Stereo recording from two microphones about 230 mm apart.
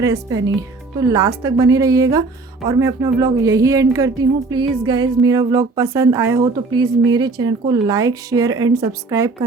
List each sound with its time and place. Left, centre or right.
0.9 s speech: centre